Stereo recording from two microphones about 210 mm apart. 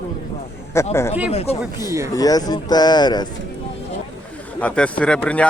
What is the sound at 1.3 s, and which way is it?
Speech, 30° left (ahead or behind).